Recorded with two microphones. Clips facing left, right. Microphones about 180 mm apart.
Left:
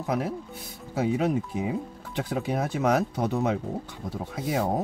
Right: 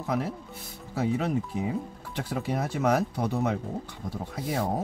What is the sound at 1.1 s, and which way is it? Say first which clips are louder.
Speech: left 2 dB; 15° left (ahead or behind).